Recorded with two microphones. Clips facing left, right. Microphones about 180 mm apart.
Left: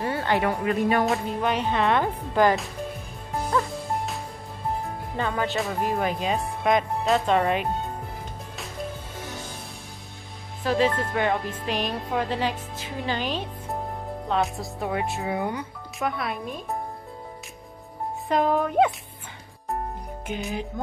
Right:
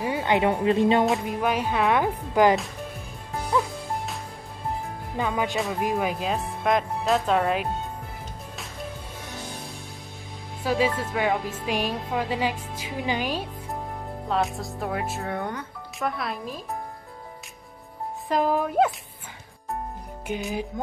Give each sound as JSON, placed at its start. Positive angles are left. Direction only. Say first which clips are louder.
{"t": 0.0, "sound": "speech", "louder": "right 2 dB", "side_deg": -15}
{"t": 1.1, "sound": "speech", "louder": "even", "side_deg": -10}
{"t": 3.3, "sound": "music", "louder": "even", "side_deg": 0}
{"t": 5.1, "sound": "speech", "louder": "right 1 dB", "side_deg": -10}
{"t": 10.6, "sound": "speech", "louder": "left 1 dB", "side_deg": -5}
{"t": 15.3, "sound": "speech", "louder": "left 2 dB", "side_deg": 10}
{"t": 16.1, "sound": "speech", "louder": "left 1 dB", "side_deg": 0}
{"t": 18.3, "sound": "speech", "louder": "left 1 dB", "side_deg": -5}
{"t": 20.3, "sound": "speech", "louder": "right 1 dB", "side_deg": 0}